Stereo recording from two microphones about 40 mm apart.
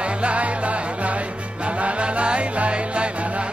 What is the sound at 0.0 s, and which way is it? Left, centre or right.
Music, right.